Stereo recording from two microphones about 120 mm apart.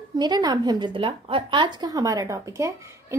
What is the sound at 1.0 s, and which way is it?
Speech, 50° right (ahead or behind).